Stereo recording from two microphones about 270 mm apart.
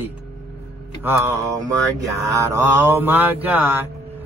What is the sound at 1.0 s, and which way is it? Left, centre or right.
Mantra, centre.